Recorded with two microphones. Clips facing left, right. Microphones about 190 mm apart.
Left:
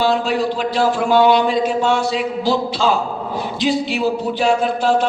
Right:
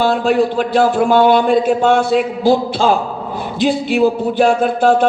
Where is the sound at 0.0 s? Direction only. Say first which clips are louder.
Right 4 dB; 50° right (ahead or behind).